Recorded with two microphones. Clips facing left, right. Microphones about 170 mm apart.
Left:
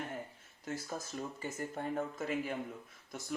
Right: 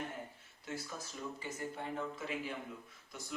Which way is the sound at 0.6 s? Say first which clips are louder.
Left 4 dB; 40° left (ahead or behind).